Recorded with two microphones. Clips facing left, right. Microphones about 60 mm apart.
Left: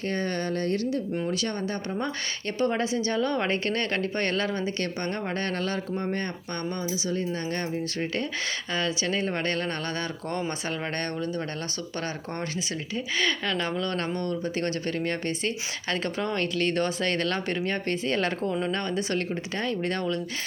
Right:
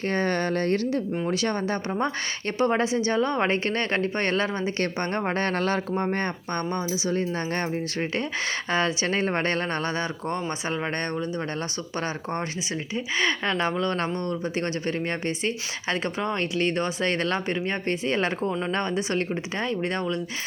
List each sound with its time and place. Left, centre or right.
0.1 s speech: right
1.3 s a woman's voice: right
8.7 s a woman's voice: right